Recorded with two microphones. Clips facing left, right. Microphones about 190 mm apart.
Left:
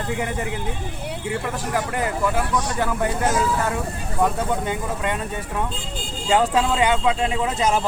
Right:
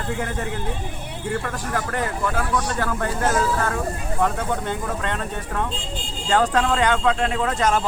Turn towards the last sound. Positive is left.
turn(degrees=10)  # may be behind; listen again after turning